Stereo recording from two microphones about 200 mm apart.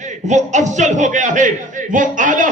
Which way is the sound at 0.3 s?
35° right (ahead or behind).